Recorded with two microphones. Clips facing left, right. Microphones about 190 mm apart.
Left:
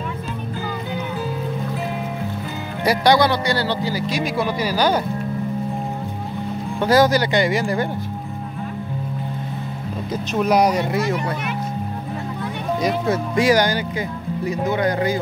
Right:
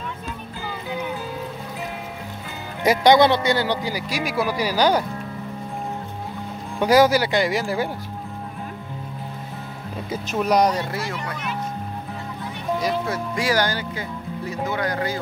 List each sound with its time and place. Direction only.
2.8 s speech: 20° right (ahead or behind)
6.8 s speech: 10° right (ahead or behind)
10.1 s speech: centre (ahead or behind); by 11.1 s 20° left (ahead or behind)
12.8 s speech: 20° left (ahead or behind)